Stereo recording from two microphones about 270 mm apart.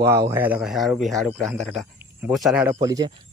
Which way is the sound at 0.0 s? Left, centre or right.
Centre.